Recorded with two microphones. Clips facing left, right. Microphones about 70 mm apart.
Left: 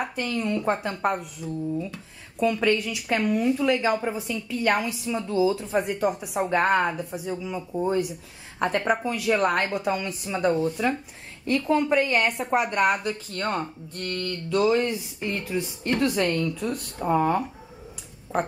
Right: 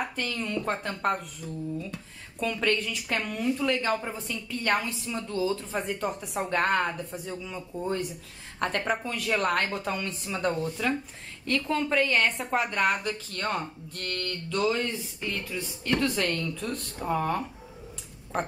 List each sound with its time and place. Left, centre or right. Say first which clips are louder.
0.0 s speech: left 4 dB; centre
14.9 s speech: left 4 dB; left
16.3 s speech: left 5 dB; centre
18.3 s speech: left 4 dB; centre